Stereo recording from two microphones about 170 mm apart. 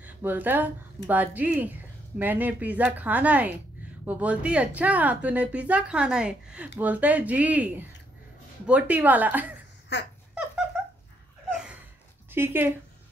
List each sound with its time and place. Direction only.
0.0 s speech: 10° right (ahead or behind)
9.9 s babbling: 90° left
11.5 s a sound: 5° right (ahead or behind)
12.3 s speech: 15° right (ahead or behind)